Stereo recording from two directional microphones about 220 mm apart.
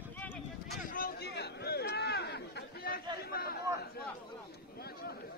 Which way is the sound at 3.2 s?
45° left (ahead or behind).